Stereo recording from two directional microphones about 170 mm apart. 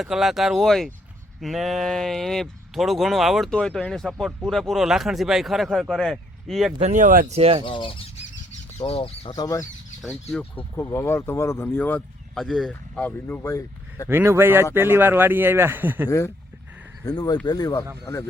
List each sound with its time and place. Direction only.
0.0 s speech: centre (ahead or behind)
6.7 s speech: 45° right (ahead or behind)
7.3 s speech: 35° right (ahead or behind)
7.6 s speech: 30° left (ahead or behind)
9.3 s speech: 20° left (ahead or behind)
10.3 s speech: 10° left (ahead or behind)
14.1 s speech: 15° right (ahead or behind)
16.0 s speech: 15° left (ahead or behind)